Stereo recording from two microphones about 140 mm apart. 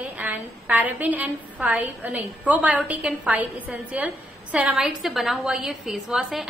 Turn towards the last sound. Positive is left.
turn(degrees=0)  # may be behind; listen again after turning